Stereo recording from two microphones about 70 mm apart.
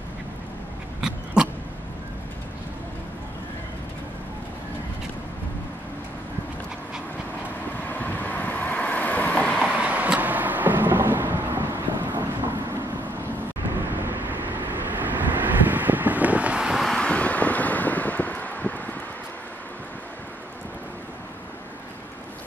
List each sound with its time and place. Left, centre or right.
1.0 s a sound: centre
7.9 s vehicle: left
9.6 s vehicle: centre; by 12.5 s right
13.8 s vehicle: right; by 16.8 s centre
17.0 s wind: centre